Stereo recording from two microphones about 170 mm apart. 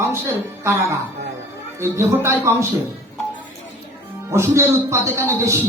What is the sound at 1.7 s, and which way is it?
Speech, 15° right (ahead or behind).